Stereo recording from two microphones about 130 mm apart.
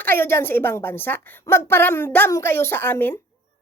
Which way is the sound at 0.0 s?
15° left (ahead or behind).